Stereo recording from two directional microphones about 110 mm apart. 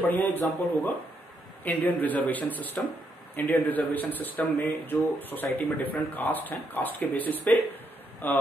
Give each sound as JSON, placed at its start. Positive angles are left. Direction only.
{"t": 0.0, "sound": "speech", "side_deg": 15}